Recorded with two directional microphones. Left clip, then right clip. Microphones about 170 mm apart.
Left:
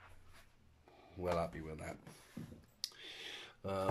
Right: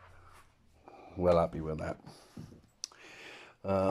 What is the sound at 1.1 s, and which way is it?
Speech, 15° right (ahead or behind).